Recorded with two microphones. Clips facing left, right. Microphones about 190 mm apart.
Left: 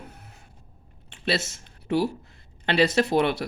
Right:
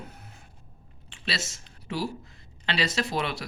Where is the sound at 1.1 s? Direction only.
55° left (ahead or behind).